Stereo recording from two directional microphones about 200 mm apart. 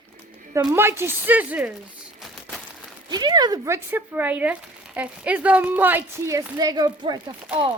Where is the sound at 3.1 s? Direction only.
20° right (ahead or behind).